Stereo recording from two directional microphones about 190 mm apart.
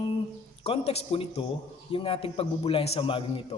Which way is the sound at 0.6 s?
30° left (ahead or behind).